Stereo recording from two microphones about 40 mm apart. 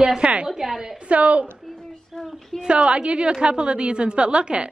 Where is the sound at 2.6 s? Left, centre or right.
Right.